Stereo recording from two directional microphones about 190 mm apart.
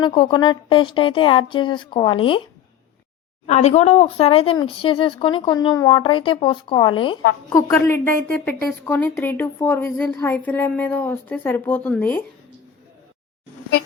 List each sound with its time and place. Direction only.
0.0 s speech: 25° left (ahead or behind)
3.4 s speech: 35° left (ahead or behind)
7.5 s a woman's voice: 15° left (ahead or behind)